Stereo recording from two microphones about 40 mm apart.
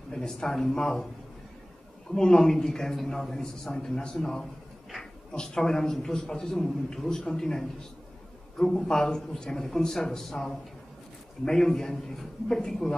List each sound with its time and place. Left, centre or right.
0.1 s a man's voice: centre
2.1 s a man's voice: centre